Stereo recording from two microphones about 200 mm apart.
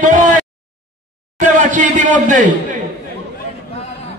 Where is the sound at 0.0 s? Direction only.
40° right (ahead or behind).